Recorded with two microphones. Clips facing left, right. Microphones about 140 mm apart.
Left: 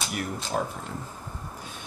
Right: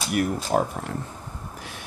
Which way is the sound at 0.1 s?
55° right (ahead or behind).